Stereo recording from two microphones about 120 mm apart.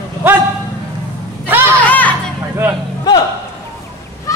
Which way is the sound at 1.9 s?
15° left (ahead or behind).